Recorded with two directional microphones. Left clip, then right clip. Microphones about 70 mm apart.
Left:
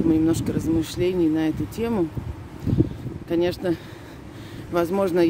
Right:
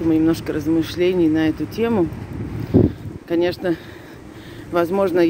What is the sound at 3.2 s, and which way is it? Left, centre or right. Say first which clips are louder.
Speech: right 3 dB; left.